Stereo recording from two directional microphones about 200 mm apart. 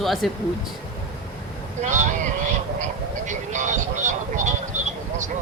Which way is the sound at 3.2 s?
40° right (ahead or behind).